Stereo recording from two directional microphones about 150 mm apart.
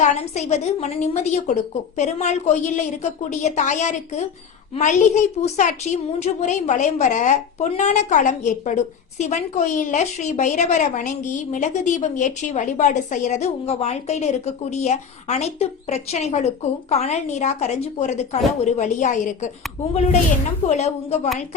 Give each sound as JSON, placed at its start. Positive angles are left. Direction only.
{"t": 0.0, "sound": "a woman's voice", "side_deg": 50}
{"t": 19.9, "sound": "a woman's voice", "side_deg": 45}